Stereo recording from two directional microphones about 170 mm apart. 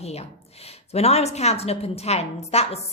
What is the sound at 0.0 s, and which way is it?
A woman's voice, 40° left (ahead or behind).